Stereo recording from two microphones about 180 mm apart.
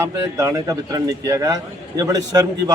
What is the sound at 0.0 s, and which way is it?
A man's voice, 15° right (ahead or behind).